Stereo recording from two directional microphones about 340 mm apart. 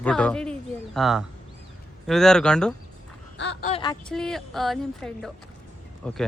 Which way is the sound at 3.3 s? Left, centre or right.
Left.